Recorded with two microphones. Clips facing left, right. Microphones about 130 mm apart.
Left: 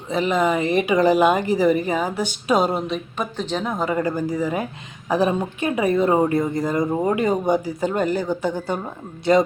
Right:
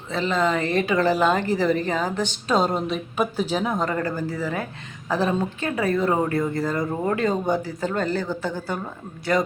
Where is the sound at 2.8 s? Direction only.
5° right (ahead or behind).